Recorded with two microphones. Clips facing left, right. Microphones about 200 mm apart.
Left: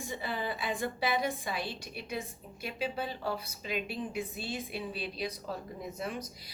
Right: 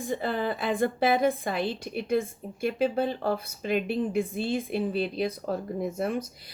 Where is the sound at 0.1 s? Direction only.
50° right (ahead or behind).